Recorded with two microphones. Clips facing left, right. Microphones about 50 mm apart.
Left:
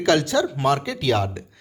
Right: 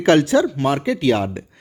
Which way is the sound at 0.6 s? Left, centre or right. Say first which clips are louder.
Right 3 dB; centre.